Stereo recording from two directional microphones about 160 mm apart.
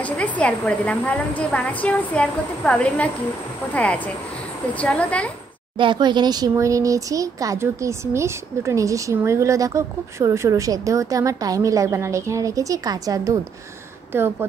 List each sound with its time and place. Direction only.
0.0 s a woman's voice: 10° left (ahead or behind)
5.8 s speech: 30° right (ahead or behind)